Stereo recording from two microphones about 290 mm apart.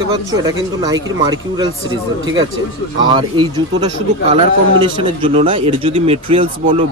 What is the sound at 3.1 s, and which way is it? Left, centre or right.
Speech, centre.